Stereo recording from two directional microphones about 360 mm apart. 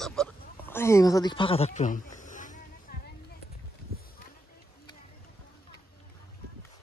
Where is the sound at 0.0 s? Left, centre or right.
Centre; by 3.0 s left.